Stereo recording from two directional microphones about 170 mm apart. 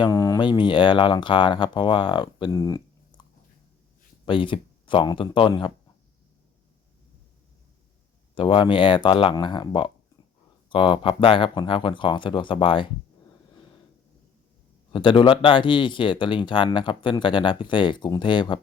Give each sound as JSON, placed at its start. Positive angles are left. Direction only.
{"t": 0.0, "sound": "speech", "side_deg": 20}
{"t": 4.3, "sound": "speech", "side_deg": 30}
{"t": 8.4, "sound": "speech", "side_deg": 30}
{"t": 14.9, "sound": "speech", "side_deg": 30}